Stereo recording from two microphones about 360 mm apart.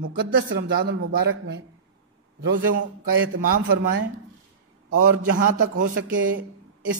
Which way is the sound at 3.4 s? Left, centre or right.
Right.